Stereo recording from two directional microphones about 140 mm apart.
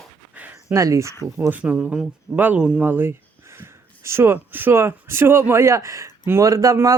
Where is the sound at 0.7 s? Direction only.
20° right (ahead or behind).